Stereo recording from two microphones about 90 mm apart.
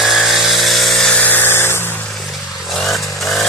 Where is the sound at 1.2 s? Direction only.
20° left (ahead or behind).